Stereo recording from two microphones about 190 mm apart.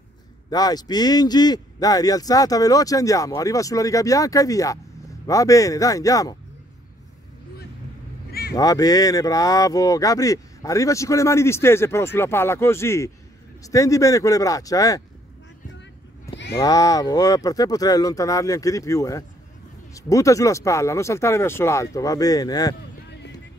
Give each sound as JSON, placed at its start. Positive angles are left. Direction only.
{"t": 0.5, "sound": "speech", "side_deg": 20}
{"t": 8.3, "sound": "honk", "side_deg": 55}
{"t": 8.5, "sound": "speech", "side_deg": 20}
{"t": 16.5, "sound": "speech", "side_deg": 20}